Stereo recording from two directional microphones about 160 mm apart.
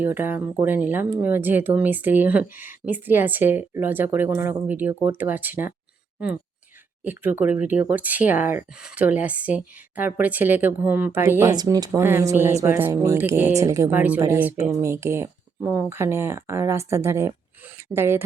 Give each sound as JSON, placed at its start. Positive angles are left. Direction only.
{"t": 0.0, "sound": "speech", "side_deg": -15}
{"t": 7.0, "sound": "speech", "side_deg": -10}
{"t": 11.5, "sound": "speech", "side_deg": -25}